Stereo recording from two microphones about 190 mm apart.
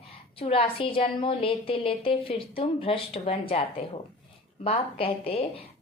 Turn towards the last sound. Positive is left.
turn(degrees=30)  # may be behind; listen again after turning